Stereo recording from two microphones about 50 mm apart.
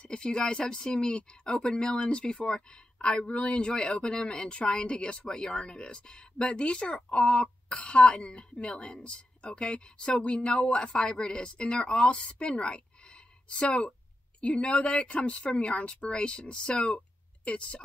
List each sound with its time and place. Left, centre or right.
0.0 s speech: centre